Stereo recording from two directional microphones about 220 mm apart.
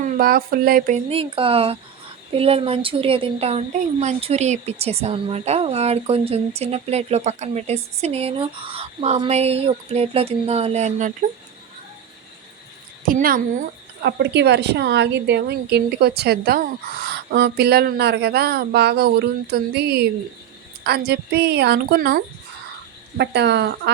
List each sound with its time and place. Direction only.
0.0 s speech: 40° right (ahead or behind)
13.1 s a woman's voice: 40° right (ahead or behind)